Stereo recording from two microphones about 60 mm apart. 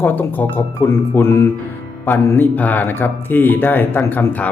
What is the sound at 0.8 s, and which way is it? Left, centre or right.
Speech, left.